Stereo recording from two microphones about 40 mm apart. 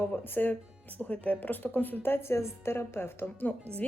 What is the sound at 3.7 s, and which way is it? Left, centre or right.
Speech, right.